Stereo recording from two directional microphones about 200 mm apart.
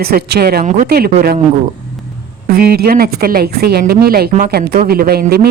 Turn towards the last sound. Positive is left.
turn(degrees=-50)  # may be behind; listen again after turning